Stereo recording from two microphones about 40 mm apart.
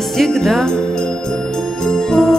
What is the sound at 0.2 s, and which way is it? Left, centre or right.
Music, centre.